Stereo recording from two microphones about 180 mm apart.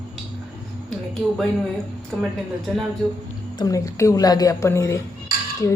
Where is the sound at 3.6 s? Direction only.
20° left (ahead or behind).